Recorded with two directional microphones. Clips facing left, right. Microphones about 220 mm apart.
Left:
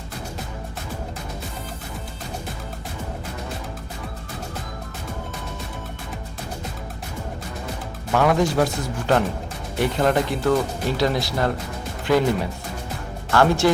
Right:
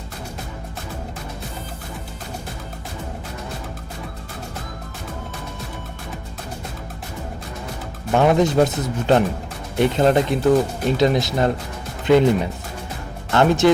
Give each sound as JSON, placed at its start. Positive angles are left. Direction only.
{"t": 8.1, "sound": "speech", "side_deg": -25}
{"t": 13.3, "sound": "speech", "side_deg": -20}